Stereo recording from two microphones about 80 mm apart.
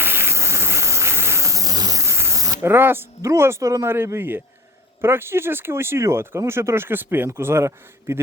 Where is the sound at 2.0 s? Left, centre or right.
Right.